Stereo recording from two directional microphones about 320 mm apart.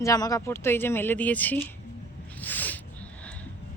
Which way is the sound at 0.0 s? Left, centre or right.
Centre.